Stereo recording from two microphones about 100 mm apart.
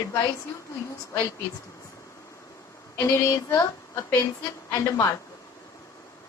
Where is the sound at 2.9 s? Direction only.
30° left (ahead or behind).